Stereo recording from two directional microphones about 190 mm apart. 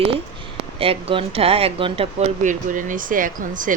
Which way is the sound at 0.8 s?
30° right (ahead or behind).